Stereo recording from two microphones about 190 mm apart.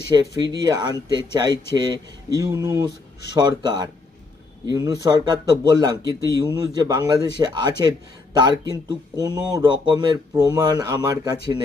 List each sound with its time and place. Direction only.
0.4 s speech: 20° right (ahead or behind)